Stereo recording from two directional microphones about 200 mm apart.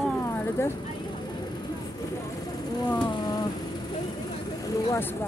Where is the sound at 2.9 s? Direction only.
20° left (ahead or behind).